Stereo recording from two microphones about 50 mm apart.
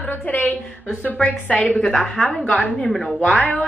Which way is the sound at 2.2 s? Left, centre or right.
Centre.